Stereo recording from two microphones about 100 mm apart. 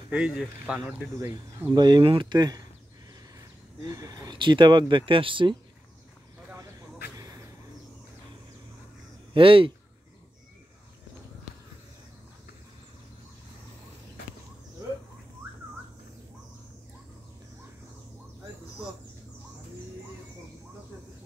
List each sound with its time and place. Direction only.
0.1 s speech: 10° right (ahead or behind)
1.7 s speech: 45° right (ahead or behind)
3.8 s speech: 35° right (ahead or behind); by 5.6 s 55° right (ahead or behind)
9.3 s speech: 60° right (ahead or behind)